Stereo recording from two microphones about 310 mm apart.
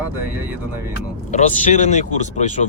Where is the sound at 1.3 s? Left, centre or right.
Left.